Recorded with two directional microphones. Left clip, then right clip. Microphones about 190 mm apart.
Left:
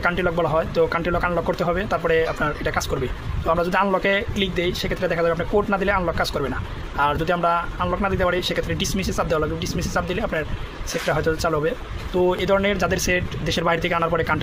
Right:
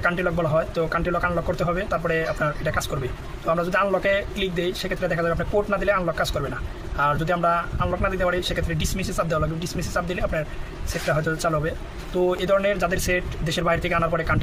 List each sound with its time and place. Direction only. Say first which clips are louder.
0.0 s speech: left 2 dB; 35° left (ahead or behind)